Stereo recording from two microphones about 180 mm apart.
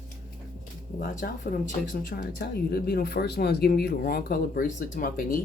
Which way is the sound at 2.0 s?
60° left (ahead or behind).